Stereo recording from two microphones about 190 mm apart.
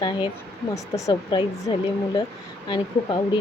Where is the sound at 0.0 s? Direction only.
25° left (ahead or behind).